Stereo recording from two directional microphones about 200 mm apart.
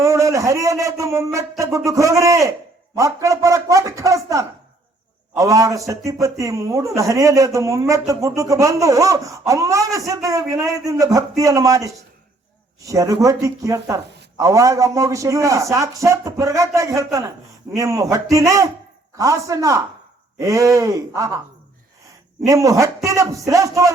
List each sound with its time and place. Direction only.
0.0 s a man's voice: 15° right (ahead or behind)
22.4 s a man's voice: 15° right (ahead or behind)